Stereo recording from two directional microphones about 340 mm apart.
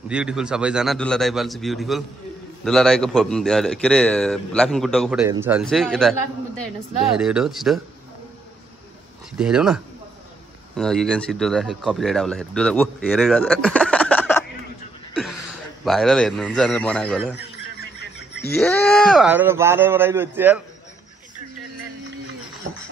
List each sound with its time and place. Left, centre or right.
0.1 s a man's voice: centre
9.4 s a man's voice: centre
10.8 s a man's voice: centre
17.7 s a sound: left
18.6 s a man's voice: centre